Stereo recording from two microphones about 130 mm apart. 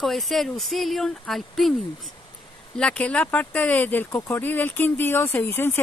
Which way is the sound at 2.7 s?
5° left (ahead or behind).